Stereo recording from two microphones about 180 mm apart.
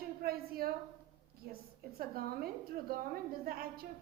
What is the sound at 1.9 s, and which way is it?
A woman's voice, 55° right (ahead or behind).